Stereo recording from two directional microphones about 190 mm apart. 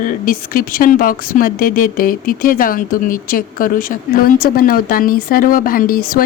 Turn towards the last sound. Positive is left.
turn(degrees=50)  # may be behind; listen again after turning